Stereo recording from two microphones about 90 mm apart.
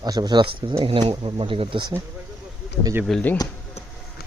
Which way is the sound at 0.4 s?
90° right.